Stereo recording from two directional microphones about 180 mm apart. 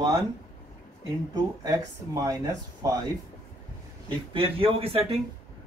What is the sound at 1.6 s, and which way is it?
Speech, 20° right (ahead or behind).